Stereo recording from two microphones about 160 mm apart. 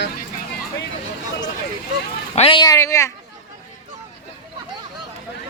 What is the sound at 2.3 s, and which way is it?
Speech, 35° left (ahead or behind).